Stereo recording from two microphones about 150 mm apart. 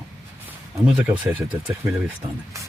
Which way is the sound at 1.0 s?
10° right (ahead or behind).